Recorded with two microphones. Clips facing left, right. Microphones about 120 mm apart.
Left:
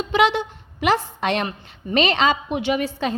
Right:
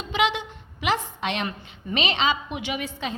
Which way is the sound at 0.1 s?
35° left (ahead or behind).